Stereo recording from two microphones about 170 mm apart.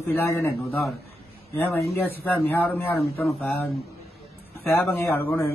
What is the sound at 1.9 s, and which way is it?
Speech, 10° left (ahead or behind).